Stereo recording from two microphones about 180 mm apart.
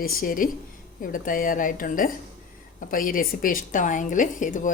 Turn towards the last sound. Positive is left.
turn(degrees=45)  # may be behind; listen again after turning